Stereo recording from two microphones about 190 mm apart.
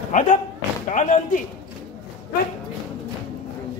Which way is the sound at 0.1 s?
40° left (ahead or behind).